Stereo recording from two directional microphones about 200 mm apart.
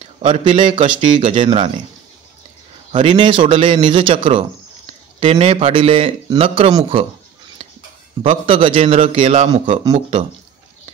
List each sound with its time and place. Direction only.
0.2 s speech: 25° right (ahead or behind)
2.9 s speech: 25° right (ahead or behind)
8.2 s speech: 30° right (ahead or behind)